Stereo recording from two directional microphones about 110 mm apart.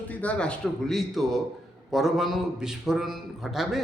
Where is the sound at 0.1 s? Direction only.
15° left (ahead or behind).